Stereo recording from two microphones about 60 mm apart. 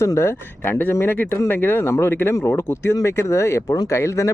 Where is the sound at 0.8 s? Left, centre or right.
Left.